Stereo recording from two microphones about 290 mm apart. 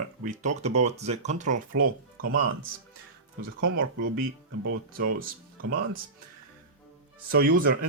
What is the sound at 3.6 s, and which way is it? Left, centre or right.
Speech, right.